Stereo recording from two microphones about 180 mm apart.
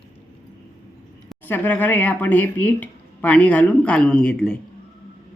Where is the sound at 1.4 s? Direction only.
10° left (ahead or behind).